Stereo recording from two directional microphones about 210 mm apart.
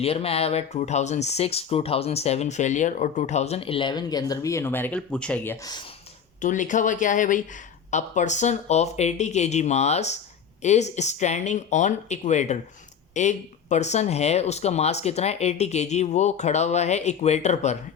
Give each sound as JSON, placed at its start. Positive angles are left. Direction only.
{"t": 0.0, "sound": "speech", "side_deg": 30}
{"t": 6.4, "sound": "speech", "side_deg": 35}